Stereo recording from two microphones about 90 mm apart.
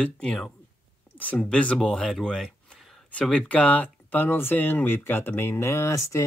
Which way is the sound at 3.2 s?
15° left (ahead or behind).